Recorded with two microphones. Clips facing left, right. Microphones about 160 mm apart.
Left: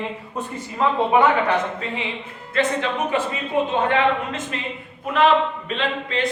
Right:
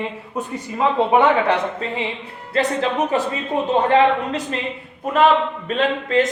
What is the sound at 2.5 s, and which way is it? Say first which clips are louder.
A man's voice: right 2 dB; 35° right (ahead or behind).